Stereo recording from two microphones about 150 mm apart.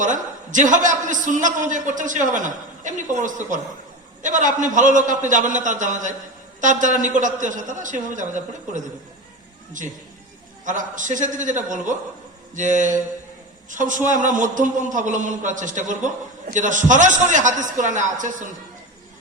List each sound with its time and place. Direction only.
0.0 s a man's voice: 55° right (ahead or behind)
10.7 s a man's voice: 55° right (ahead or behind)